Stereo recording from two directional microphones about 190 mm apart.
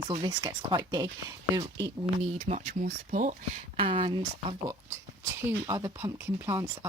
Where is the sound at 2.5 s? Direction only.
45° right (ahead or behind).